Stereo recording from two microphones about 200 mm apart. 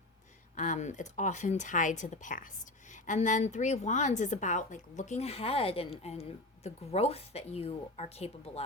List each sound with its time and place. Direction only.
0.5 s a woman's voice: 40° left (ahead or behind)